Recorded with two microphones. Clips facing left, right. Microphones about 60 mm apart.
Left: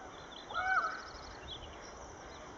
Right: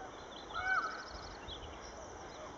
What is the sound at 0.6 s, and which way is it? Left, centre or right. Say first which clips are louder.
Crow: left 3 dB; left.